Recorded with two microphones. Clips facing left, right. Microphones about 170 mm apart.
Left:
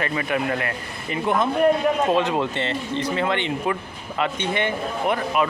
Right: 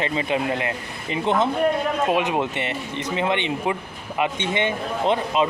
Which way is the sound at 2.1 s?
15° right (ahead or behind).